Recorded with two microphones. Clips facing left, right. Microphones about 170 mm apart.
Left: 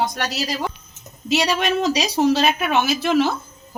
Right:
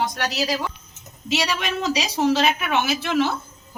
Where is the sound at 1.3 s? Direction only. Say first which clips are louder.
Left 5 dB; 40° left (ahead or behind).